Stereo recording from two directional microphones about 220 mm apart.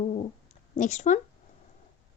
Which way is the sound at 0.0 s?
30° left (ahead or behind).